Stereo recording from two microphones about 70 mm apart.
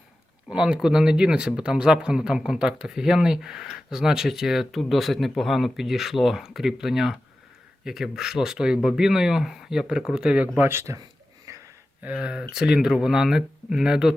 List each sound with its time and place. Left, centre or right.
0.5 s speech: centre
10.6 s speech: right
11.5 s a sound: right
12.0 s speech: centre